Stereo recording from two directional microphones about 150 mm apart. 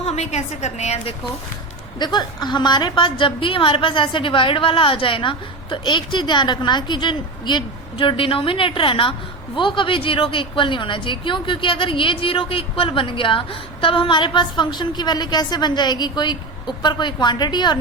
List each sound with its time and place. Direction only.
0.0 s a woman's voice: 45° left (ahead or behind)
2.0 s a woman's voice: 30° left (ahead or behind)